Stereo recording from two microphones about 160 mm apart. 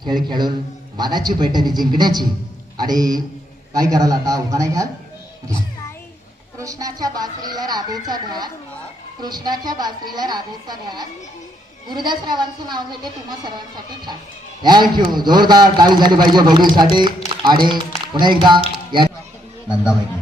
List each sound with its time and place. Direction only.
0.0 s a man's voice: 25° right (ahead or behind)
6.6 s a man's voice: 20° right (ahead or behind)
14.6 s a man's voice: 25° right (ahead or behind)
18.9 s music: 30° right (ahead or behind)
19.6 s a man's voice: 5° right (ahead or behind)